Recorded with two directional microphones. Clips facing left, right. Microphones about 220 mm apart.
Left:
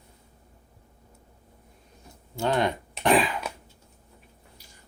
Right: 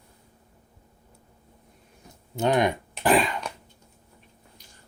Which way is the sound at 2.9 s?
Centre (ahead or behind).